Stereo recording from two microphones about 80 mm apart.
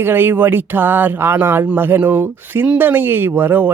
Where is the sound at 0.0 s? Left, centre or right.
Right.